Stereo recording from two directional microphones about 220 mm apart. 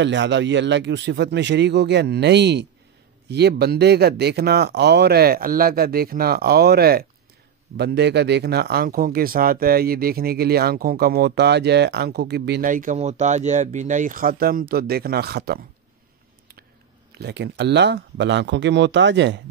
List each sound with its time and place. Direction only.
0.0 s speech: 55° right (ahead or behind)
17.1 s speech: 50° right (ahead or behind)